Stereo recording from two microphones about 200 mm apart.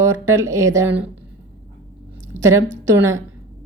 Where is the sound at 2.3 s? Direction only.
15° right (ahead or behind).